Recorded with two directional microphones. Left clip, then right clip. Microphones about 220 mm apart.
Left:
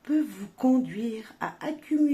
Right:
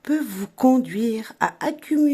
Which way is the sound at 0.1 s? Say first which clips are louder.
Right 3 dB; 45° right (ahead or behind).